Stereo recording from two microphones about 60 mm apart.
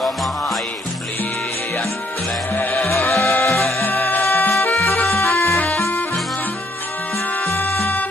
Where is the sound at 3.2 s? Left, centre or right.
Left.